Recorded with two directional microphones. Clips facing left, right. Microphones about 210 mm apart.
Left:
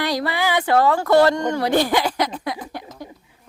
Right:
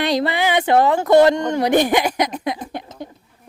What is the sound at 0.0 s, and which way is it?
Speech, 20° right (ahead or behind).